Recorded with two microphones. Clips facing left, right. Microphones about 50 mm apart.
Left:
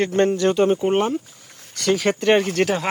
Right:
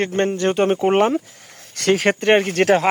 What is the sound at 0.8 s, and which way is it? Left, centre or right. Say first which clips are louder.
Speech: right 4 dB; right.